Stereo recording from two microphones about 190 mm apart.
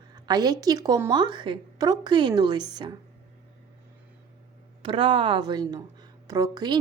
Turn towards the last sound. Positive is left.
turn(degrees=-20)  # may be behind; listen again after turning